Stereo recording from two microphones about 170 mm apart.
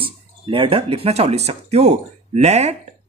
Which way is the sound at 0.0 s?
30° right (ahead or behind).